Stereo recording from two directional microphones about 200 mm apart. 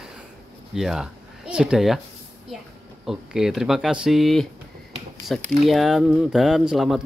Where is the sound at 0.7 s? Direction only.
Centre (ahead or behind).